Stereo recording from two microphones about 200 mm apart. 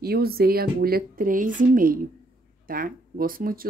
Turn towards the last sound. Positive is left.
turn(degrees=-45)  # may be behind; listen again after turning